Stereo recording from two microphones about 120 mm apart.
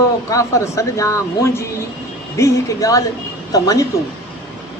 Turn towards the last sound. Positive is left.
turn(degrees=30)  # may be behind; listen again after turning